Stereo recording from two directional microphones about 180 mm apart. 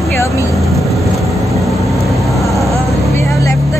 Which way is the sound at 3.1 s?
15° left (ahead or behind).